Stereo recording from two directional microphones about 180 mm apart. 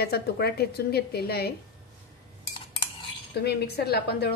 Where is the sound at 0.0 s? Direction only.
60° left (ahead or behind).